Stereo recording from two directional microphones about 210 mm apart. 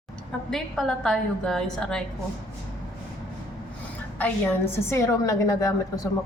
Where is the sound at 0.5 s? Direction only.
Centre (ahead or behind).